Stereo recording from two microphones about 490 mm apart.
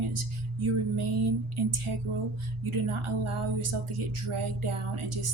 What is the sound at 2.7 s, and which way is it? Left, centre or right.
Speech, right.